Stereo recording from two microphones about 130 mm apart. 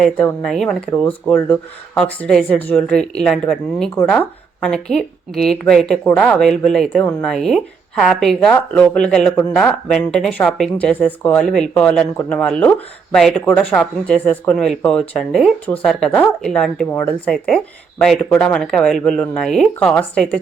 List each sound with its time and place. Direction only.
0.0 s speech: 10° left (ahead or behind)
16.9 s speech: 20° left (ahead or behind)
17.2 s speech: 5° left (ahead or behind)